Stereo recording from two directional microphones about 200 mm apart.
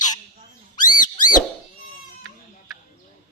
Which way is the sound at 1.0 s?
40° left (ahead or behind).